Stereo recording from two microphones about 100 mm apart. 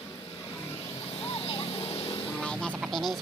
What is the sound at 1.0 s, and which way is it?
Vehicle, 60° left (ahead or behind).